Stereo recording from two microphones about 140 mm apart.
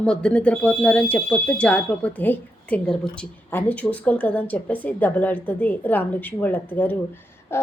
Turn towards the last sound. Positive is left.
turn(degrees=15)  # may be behind; listen again after turning